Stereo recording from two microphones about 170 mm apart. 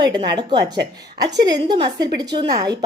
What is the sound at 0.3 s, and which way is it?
A woman's voice, 25° right (ahead or behind).